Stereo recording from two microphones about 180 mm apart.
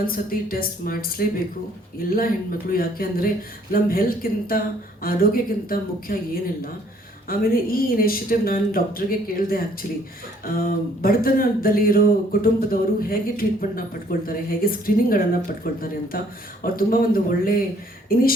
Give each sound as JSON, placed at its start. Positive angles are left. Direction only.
{"t": 0.0, "sound": "speech", "side_deg": 55}
{"t": 7.3, "sound": "speech", "side_deg": 55}